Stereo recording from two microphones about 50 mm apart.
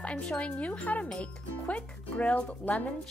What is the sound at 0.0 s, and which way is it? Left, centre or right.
Speech, centre.